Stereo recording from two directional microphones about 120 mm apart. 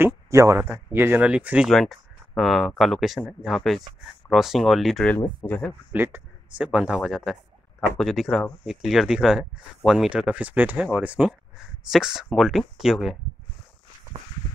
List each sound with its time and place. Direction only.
0.0 s speech: 25° right (ahead or behind)
1.7 s speech: 5° left (ahead or behind)
5.4 s speech: 10° left (ahead or behind)
5.9 s speech: 20° right (ahead or behind)